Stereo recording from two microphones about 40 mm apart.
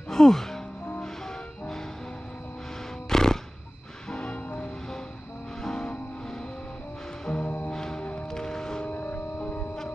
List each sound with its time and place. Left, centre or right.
0.1 s music: centre
3.1 s music: centre
7.2 s music: left
8.4 s music: centre
8.8 s music: left